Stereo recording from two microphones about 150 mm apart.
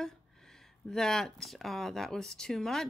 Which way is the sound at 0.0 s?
5° left (ahead or behind).